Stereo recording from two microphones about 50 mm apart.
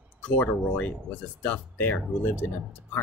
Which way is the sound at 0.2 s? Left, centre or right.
Left.